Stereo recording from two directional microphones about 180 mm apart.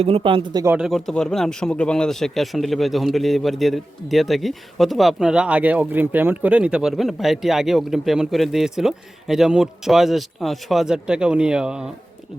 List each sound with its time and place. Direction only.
0.0 s speech: 30° right (ahead or behind)
0.6 s speech: 5° right (ahead or behind)